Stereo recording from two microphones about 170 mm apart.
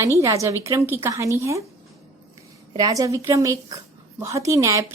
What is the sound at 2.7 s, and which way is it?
A woman's voice, 20° right (ahead or behind).